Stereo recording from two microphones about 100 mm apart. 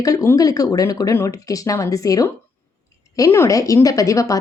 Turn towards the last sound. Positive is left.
turn(degrees=30)  # may be behind; listen again after turning